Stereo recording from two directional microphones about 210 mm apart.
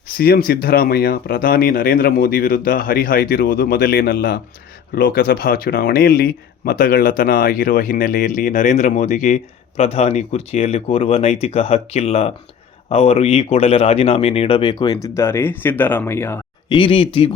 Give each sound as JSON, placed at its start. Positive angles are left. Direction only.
{"t": 0.1, "sound": "speech", "side_deg": 45}
{"t": 16.7, "sound": "speech", "side_deg": 25}